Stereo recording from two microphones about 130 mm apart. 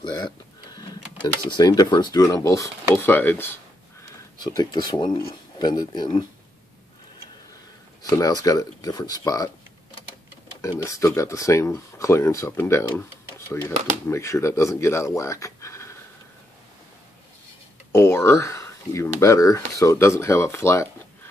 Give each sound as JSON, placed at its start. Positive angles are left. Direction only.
{"t": 0.0, "sound": "speech", "side_deg": 30}
{"t": 4.4, "sound": "speech", "side_deg": 30}
{"t": 8.0, "sound": "speech", "side_deg": 30}
{"t": 10.8, "sound": "speech", "side_deg": 25}
{"t": 17.9, "sound": "speech", "side_deg": 20}